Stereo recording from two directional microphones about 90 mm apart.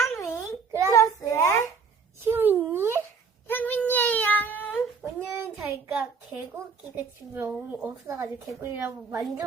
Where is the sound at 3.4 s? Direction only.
20° left (ahead or behind).